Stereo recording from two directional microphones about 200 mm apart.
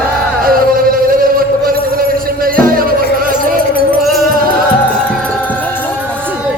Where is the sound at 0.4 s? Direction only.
45° right (ahead or behind).